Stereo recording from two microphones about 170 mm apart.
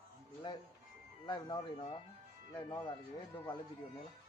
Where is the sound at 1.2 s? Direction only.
25° left (ahead or behind).